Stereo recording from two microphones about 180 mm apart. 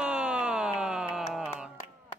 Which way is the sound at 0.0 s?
5° right (ahead or behind).